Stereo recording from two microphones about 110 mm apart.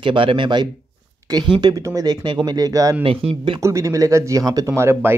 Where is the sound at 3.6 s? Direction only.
30° right (ahead or behind).